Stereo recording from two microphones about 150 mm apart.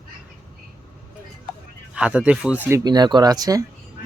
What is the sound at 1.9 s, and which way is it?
Speech, 5° right (ahead or behind).